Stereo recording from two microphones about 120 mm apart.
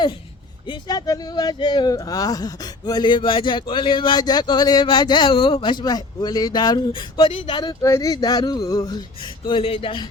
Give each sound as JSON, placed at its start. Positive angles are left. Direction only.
{"t": 0.7, "sound": "speech", "side_deg": 35}
{"t": 7.8, "sound": "speech", "side_deg": 25}